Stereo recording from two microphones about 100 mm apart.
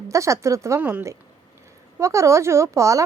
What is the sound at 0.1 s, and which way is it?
Speech, 30° right (ahead or behind).